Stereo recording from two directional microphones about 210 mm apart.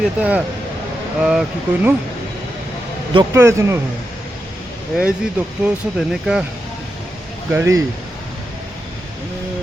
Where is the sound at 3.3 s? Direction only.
15° right (ahead or behind).